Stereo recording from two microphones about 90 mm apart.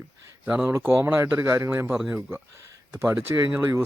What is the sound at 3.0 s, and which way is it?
Speech, 30° right (ahead or behind).